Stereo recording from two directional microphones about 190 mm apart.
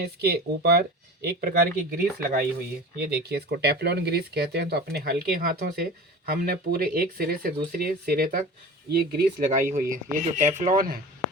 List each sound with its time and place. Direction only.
0.0 s speech: 55° right (ahead or behind)
9.5 s speech: 40° right (ahead or behind)